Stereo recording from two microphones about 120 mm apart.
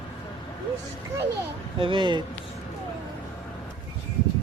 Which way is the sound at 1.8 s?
45° right (ahead or behind).